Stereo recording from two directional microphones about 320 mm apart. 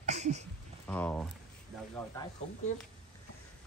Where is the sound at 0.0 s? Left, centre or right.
Right.